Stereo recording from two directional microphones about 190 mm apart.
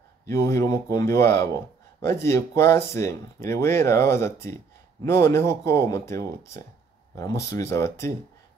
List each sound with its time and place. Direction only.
0.3 s speech: 15° left (ahead or behind)